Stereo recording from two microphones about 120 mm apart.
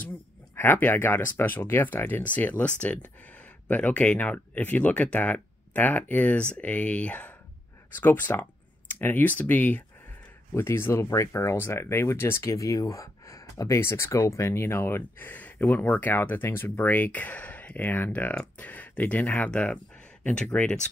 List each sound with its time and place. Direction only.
0.6 s speech: 20° left (ahead or behind)